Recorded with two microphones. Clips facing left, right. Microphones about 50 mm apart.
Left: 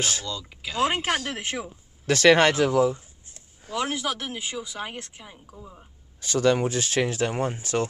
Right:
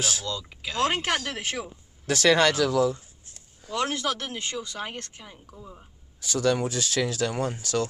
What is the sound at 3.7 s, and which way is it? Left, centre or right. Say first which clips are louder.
Speech: even; centre.